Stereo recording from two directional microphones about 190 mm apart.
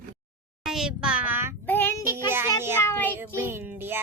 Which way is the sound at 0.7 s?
5° right (ahead or behind).